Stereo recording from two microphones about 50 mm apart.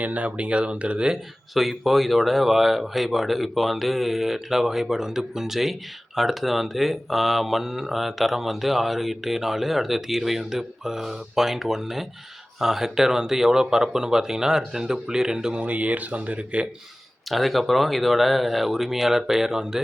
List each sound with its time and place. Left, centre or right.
0.0 s speech: right
1.5 s speech: centre
15.6 s speech: right
17.2 s speech: centre